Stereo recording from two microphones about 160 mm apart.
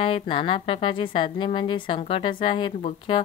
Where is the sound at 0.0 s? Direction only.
35° left (ahead or behind).